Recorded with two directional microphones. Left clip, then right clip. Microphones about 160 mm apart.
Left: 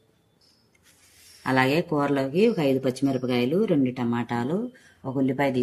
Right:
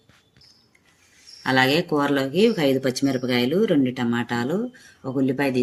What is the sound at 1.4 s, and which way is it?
Speech, 20° left (ahead or behind).